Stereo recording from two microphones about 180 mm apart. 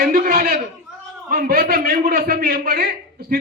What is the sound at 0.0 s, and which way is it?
A man's voice, 55° right (ahead or behind).